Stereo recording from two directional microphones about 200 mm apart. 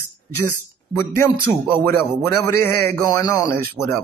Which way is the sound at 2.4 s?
10° left (ahead or behind).